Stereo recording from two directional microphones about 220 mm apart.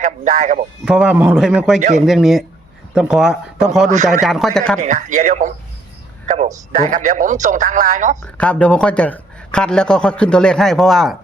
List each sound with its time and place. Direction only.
0.0 s speech: 35° right (ahead or behind)
0.9 s a man's voice: 5° right (ahead or behind)
3.9 s speech: 30° right (ahead or behind)
4.2 s a man's voice: centre (ahead or behind)
4.8 s speech: 35° right (ahead or behind)
8.2 s a man's voice: 5° left (ahead or behind)